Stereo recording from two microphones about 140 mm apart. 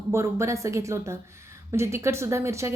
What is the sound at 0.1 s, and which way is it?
A woman's voice, 20° right (ahead or behind).